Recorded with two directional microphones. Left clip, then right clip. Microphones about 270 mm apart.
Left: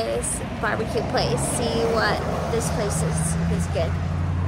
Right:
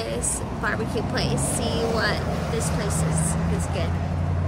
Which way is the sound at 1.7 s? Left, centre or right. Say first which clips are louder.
Left 4 dB; left.